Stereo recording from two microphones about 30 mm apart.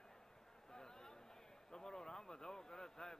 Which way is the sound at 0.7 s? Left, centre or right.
Left.